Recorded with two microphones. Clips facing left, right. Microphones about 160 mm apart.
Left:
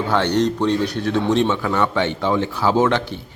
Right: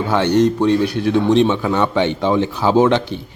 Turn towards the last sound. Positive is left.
turn(degrees=-20)  # may be behind; listen again after turning